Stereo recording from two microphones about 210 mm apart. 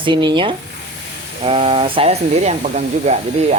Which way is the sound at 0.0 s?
20° right (ahead or behind).